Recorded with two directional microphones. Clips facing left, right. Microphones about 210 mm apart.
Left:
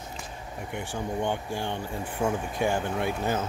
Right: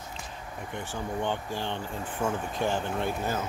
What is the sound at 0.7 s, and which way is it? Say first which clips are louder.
Speech: left 2 dB; 15° left (ahead or behind).